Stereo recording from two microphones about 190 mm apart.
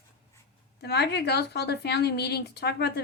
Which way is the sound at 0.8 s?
60° left (ahead or behind).